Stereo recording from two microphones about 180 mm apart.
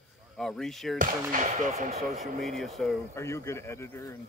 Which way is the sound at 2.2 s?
Centre (ahead or behind).